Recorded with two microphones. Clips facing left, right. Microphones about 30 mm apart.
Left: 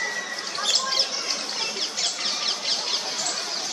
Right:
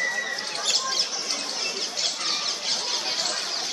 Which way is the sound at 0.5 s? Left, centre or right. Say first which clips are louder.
Left 3 dB; left.